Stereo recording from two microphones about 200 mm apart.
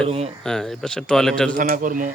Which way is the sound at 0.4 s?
Centre (ahead or behind).